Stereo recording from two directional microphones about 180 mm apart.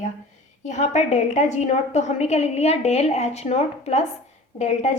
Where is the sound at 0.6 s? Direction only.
40° left (ahead or behind).